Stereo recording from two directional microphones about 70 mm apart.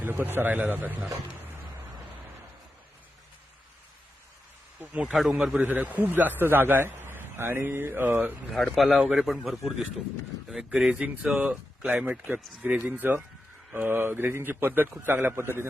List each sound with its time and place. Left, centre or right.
0.0 s speech: right
5.0 s a man's voice: centre
5.5 s a man's voice: right
8.4 s a man's voice: centre; by 15.6 s right